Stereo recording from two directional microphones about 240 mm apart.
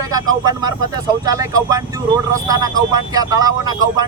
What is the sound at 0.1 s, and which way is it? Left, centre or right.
Speech, centre.